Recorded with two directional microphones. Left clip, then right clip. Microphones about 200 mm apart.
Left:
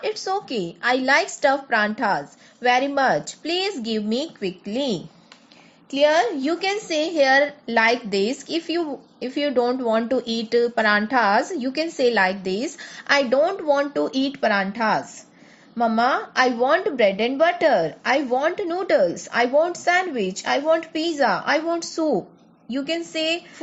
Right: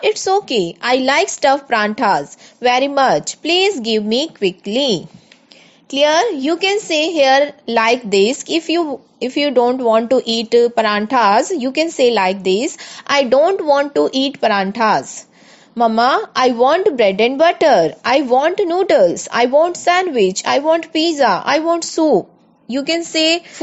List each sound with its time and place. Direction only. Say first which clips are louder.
0.0 s a woman's voice: right 10 dB; 35° right (ahead or behind)
6.0 s a woman's voice: right 5 dB; 40° right (ahead or behind)